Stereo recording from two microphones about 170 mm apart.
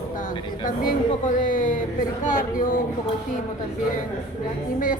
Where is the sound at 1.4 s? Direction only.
50° left (ahead or behind).